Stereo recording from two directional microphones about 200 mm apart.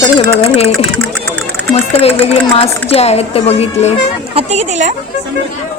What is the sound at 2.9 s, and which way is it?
Speech, 30° left (ahead or behind).